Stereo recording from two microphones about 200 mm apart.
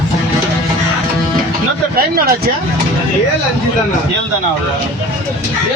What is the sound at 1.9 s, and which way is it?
Speech, 50° right (ahead or behind).